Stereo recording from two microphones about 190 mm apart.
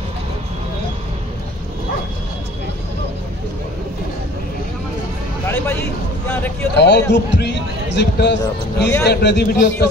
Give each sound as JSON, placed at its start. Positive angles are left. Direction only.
{"t": 6.2, "sound": "speech", "side_deg": 10}
{"t": 6.8, "sound": "speech", "side_deg": 65}